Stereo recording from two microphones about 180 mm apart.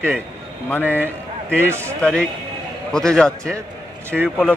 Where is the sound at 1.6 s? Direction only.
15° right (ahead or behind).